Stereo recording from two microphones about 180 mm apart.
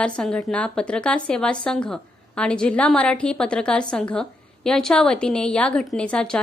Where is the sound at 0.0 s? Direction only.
5° left (ahead or behind).